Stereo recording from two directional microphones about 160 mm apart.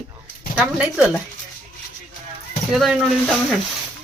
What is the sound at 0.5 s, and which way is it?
Speech, 5° right (ahead or behind).